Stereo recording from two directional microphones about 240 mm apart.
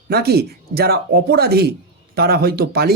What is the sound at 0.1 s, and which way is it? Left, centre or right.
Speech, right.